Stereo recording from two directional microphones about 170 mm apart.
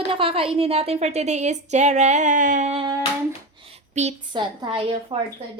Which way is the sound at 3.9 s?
40° right (ahead or behind).